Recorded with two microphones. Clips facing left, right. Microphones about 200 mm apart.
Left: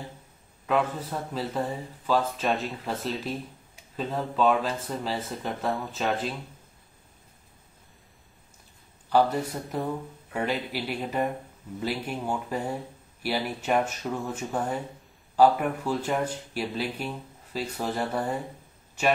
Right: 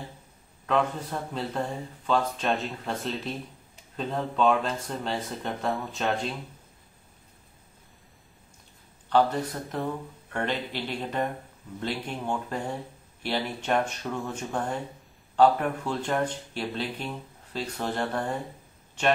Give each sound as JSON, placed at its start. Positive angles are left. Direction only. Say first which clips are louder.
{"t": 0.7, "sound": "speech", "louder": "even", "side_deg": 5}
{"t": 9.1, "sound": "speech", "louder": "even", "side_deg": 10}